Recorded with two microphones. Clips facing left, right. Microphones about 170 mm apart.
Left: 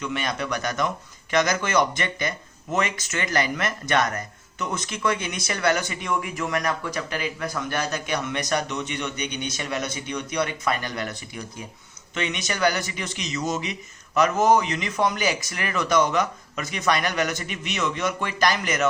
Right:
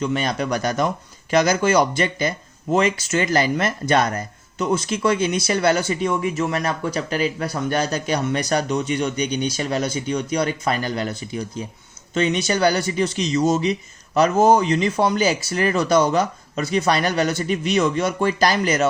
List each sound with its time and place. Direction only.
0.0 s speech: 35° right (ahead or behind)